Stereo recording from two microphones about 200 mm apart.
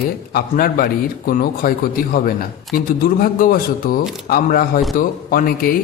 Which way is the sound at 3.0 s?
45° left (ahead or behind).